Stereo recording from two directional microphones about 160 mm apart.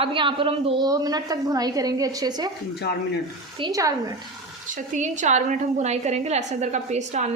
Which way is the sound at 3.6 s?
20° right (ahead or behind).